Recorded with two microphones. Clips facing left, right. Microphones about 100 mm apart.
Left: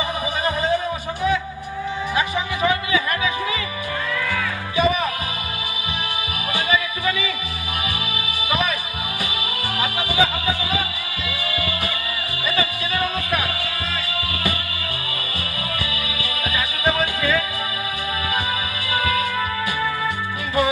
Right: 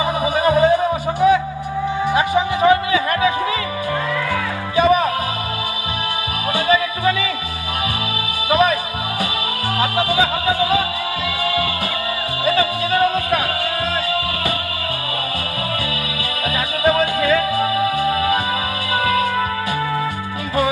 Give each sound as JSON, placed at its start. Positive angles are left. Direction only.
{"t": 0.2, "sound": "music", "side_deg": -20}
{"t": 2.6, "sound": "music", "side_deg": -40}
{"t": 6.5, "sound": "music", "side_deg": -40}
{"t": 8.5, "sound": "music", "side_deg": -40}
{"t": 9.8, "sound": "music", "side_deg": -40}
{"t": 12.4, "sound": "music", "side_deg": -45}
{"t": 16.4, "sound": "music", "side_deg": -45}